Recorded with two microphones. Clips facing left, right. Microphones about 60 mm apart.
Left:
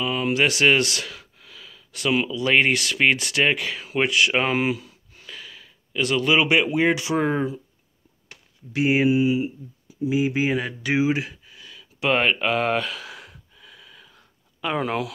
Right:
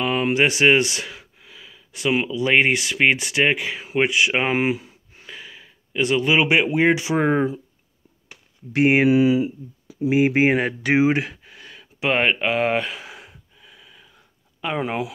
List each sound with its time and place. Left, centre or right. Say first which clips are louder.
0.0 s a sound: right 3 dB; right
0.3 s speech: right 2 dB; right
8.7 s speech: right 3 dB; right
9.1 s speech: right 4 dB; right
12.0 s gasp: right 1 dB; centre